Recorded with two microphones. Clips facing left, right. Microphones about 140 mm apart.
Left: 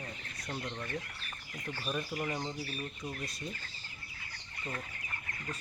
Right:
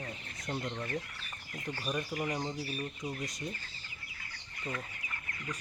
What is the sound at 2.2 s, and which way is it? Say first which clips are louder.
Speech: right 2 dB; 15° right (ahead or behind).